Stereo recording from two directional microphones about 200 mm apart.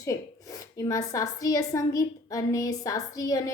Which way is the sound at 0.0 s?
15° left (ahead or behind).